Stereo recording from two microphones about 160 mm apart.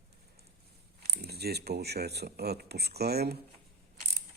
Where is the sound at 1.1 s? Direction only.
90° right.